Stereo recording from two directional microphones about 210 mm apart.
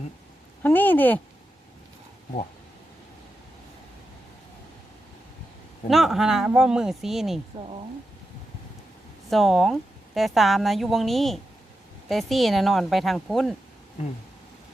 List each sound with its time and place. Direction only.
0.6 s speech: 10° left (ahead or behind)
5.9 s speech: centre (ahead or behind)
9.3 s speech: centre (ahead or behind)